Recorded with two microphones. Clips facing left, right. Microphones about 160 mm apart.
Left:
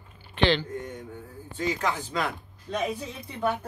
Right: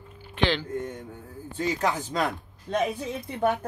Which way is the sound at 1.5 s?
40° right (ahead or behind).